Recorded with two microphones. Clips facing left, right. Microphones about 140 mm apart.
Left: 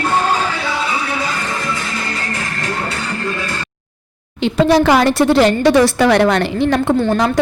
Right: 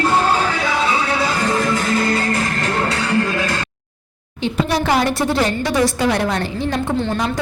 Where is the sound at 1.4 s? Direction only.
40° right (ahead or behind); by 3.5 s 80° right.